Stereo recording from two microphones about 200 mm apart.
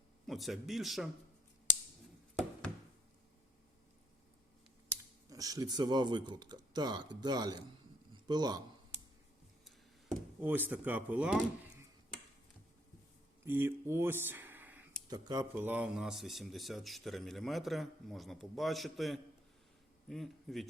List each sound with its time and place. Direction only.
0.3 s speech: centre (ahead or behind)
5.3 s a man's voice: 15° right (ahead or behind)
9.6 s speech: 5° right (ahead or behind)
13.4 s speech: 10° right (ahead or behind)
15.1 s speech: 20° right (ahead or behind)
15.5 s a man's voice: 10° right (ahead or behind)